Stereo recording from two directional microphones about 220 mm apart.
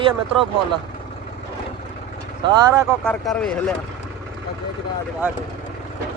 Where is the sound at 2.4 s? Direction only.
20° right (ahead or behind).